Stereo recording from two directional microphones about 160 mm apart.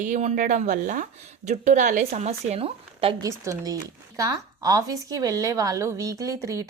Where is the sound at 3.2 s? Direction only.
20° right (ahead or behind).